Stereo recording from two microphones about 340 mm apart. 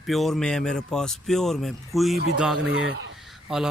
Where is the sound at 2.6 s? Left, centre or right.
Right.